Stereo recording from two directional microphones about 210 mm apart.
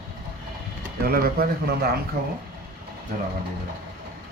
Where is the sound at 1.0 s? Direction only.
45° right (ahead or behind).